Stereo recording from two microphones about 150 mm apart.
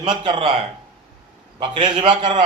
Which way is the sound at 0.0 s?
35° right (ahead or behind).